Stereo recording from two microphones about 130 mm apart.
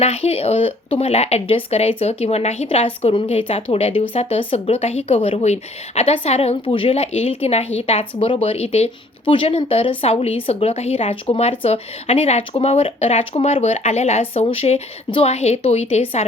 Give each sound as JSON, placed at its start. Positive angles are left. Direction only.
{"t": 0.0, "sound": "speech", "side_deg": 50}